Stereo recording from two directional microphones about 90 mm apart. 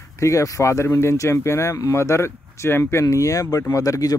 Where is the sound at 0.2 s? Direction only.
35° left (ahead or behind).